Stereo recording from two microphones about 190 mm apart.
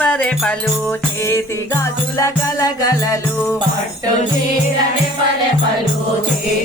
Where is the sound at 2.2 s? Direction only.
20° left (ahead or behind).